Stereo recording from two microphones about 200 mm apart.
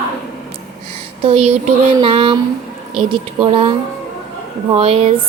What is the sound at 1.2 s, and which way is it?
A woman's voice, 30° right (ahead or behind).